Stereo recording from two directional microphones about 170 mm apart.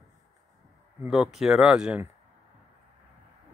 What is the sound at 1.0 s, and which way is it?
Speech, 5° right (ahead or behind).